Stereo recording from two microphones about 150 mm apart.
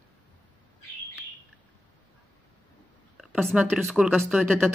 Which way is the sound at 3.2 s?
5° left (ahead or behind).